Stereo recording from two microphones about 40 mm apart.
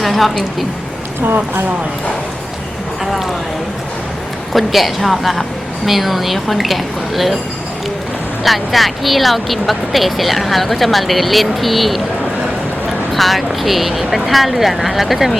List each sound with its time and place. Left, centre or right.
0.0 s speech: centre
1.2 s speech: right
4.5 s speech: centre
8.4 s speech: centre
13.1 s speech: centre